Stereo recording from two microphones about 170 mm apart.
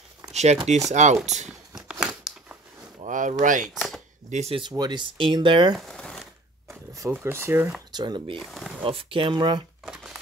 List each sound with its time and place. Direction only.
0.3 s a sound: 40° right (ahead or behind)
0.7 s speech: 40° right (ahead or behind)
1.8 s a sound: 5° right (ahead or behind)
3.0 s speech: 45° right (ahead or behind)
3.6 s a sound: centre (ahead or behind)
4.3 s speech: 40° right (ahead or behind)
5.8 s crumpling: 5° left (ahead or behind)
6.7 s speech: 15° right (ahead or behind)
7.9 s speech: 25° right (ahead or behind)
8.4 s speech: centre (ahead or behind)
8.8 s speech: 30° right (ahead or behind)